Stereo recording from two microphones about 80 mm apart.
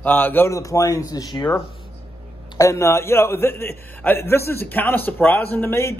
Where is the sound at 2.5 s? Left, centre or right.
Left.